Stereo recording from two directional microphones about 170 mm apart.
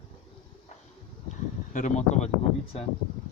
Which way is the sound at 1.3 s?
45° left (ahead or behind).